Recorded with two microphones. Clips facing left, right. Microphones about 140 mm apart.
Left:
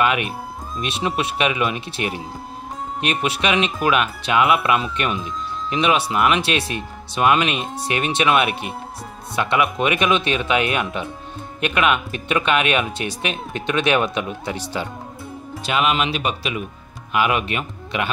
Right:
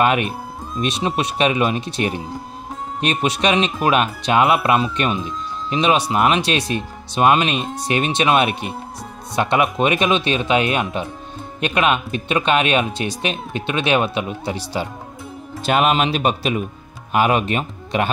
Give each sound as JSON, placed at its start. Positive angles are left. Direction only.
{"t": 0.0, "sound": "speech", "side_deg": -35}
{"t": 14.6, "sound": "speech", "side_deg": -10}
{"t": 15.6, "sound": "speech", "side_deg": -45}